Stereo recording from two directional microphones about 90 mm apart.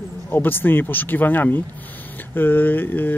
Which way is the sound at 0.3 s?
20° left (ahead or behind).